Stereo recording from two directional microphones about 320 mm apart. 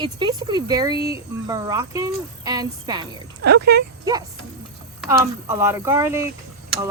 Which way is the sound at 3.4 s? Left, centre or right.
Right.